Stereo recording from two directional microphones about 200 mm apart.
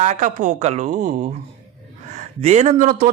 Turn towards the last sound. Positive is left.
turn(degrees=-40)  # may be behind; listen again after turning